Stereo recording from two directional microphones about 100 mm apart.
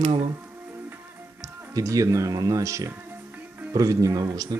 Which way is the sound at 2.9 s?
20° right (ahead or behind).